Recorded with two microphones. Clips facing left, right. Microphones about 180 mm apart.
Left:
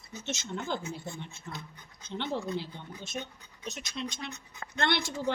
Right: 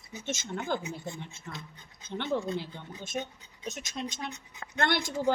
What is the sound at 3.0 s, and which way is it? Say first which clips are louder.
A woman's voice: right 4 dB; 50° right (ahead or behind).